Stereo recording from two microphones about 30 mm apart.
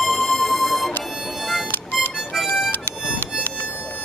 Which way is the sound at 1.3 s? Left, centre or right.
Centre.